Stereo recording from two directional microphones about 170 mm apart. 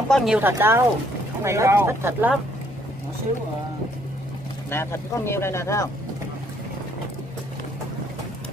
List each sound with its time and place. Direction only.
0.1 s speech: 5° right (ahead or behind)
4.6 s speech: 15° left (ahead or behind)